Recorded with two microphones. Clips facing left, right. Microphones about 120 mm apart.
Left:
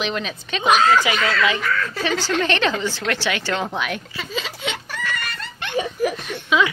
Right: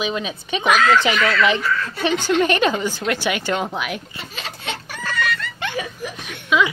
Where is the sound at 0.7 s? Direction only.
25° left (ahead or behind).